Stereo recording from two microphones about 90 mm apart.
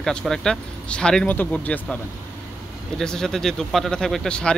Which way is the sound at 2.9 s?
5° left (ahead or behind).